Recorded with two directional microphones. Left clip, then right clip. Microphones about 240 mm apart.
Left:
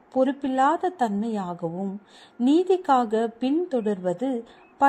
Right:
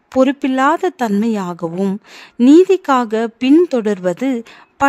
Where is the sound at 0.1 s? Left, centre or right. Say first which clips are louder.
Right 9 dB; right.